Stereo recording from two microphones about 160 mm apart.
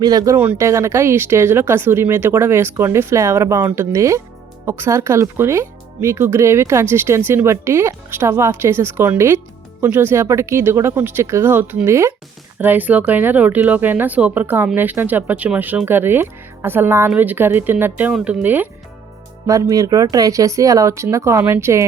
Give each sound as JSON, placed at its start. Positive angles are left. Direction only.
{"t": 0.0, "sound": "speech", "side_deg": -25}
{"t": 0.3, "sound": "speech", "side_deg": -15}